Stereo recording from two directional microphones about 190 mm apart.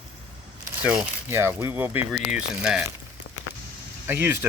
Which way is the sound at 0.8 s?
5° right (ahead or behind).